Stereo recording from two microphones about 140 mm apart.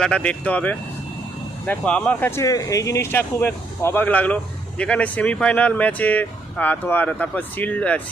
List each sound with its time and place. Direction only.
0.0 s speech: 5° left (ahead or behind)